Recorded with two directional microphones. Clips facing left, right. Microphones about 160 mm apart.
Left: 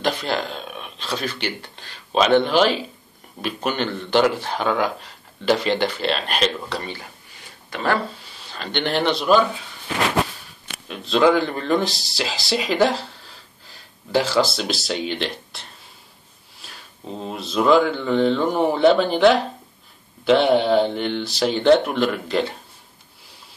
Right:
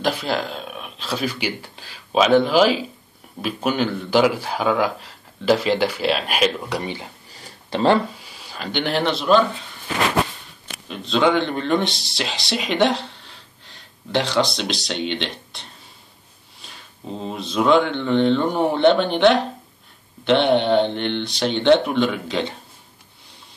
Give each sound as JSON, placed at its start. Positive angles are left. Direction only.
{"t": 0.0, "sound": "speech", "side_deg": -5}
{"t": 7.4, "sound": "a sound", "side_deg": -30}
{"t": 8.2, "sound": "speech", "side_deg": -10}
{"t": 10.9, "sound": "speech", "side_deg": 0}
{"t": 16.6, "sound": "a sound", "side_deg": 5}
{"t": 17.2, "sound": "speech", "side_deg": 0}